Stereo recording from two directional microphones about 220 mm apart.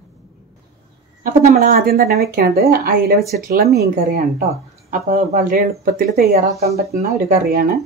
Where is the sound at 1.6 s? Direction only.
40° right (ahead or behind).